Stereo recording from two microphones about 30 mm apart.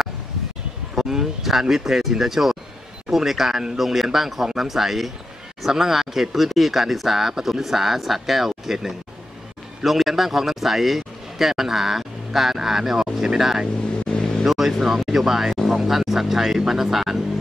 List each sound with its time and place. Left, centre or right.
0.9 s a man's voice: centre
14.0 s vehicle: left
14.4 s speech: centre